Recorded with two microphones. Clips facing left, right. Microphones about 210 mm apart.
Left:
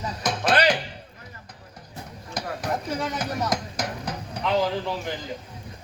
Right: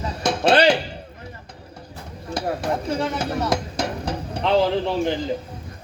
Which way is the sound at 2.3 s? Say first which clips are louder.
Right 5 dB; 30° right (ahead or behind).